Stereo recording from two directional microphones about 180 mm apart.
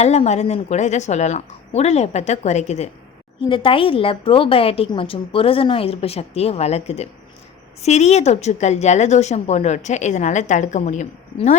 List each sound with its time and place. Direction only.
0.0 s a woman's voice: 40° left (ahead or behind)